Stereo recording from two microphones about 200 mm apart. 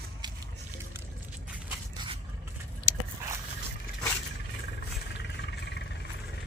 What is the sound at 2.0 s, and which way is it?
Scrape, 20° right (ahead or behind).